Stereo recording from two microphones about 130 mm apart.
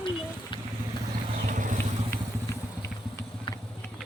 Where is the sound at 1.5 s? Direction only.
85° right.